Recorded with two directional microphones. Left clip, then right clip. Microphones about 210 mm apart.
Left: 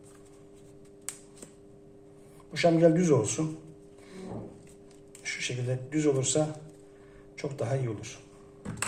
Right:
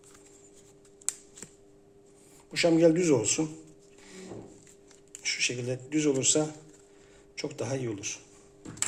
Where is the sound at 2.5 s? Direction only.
35° right (ahead or behind).